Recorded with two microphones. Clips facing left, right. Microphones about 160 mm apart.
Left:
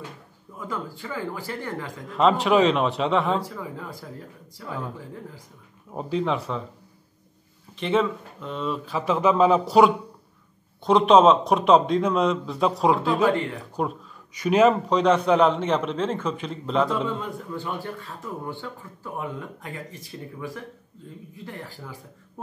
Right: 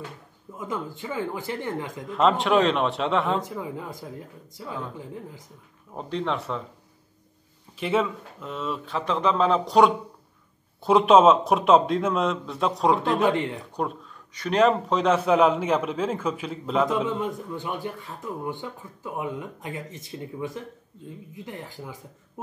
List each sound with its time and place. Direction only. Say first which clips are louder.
0.6 s a man's voice: right 1 dB; 20° right (ahead or behind)
2.1 s a man's voice: left 1 dB; centre (ahead or behind)
3.4 s a man's voice: right 2 dB; 20° right (ahead or behind)
5.9 s a man's voice: left 3 dB; 5° left (ahead or behind)
7.7 s a man's voice: left 2 dB; 5° right (ahead or behind)
10.8 s a man's voice: even; 5° right (ahead or behind)
13.2 s a man's voice: left 1 dB; 20° right (ahead or behind)
13.7 s a man's voice: left 3 dB; 5° left (ahead or behind)
16.9 s a man's voice: right 1 dB; 15° right (ahead or behind)